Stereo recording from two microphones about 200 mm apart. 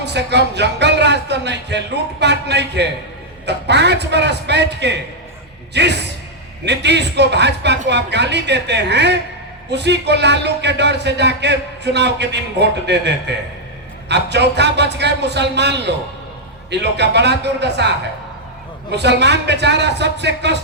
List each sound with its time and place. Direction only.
0.0 s a man's voice: 60° right (ahead or behind)